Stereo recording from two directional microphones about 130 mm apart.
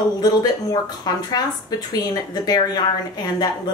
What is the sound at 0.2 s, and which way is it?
Speech, 30° left (ahead or behind).